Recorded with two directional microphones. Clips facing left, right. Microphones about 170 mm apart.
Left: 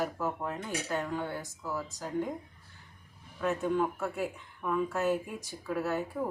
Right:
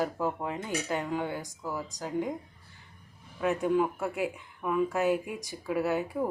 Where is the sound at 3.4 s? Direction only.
10° right (ahead or behind).